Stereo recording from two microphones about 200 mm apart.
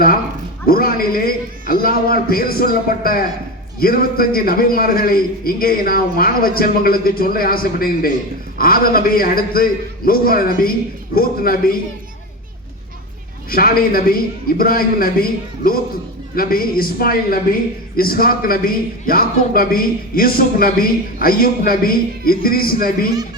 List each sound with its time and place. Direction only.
0.7 s a man's voice: 45° left (ahead or behind)
13.5 s a man's voice: 45° left (ahead or behind)